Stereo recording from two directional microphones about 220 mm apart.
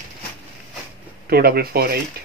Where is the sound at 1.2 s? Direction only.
45° right (ahead or behind).